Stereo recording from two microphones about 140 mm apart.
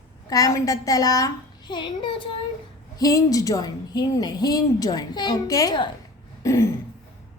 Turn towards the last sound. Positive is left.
turn(degrees=20)  # may be behind; listen again after turning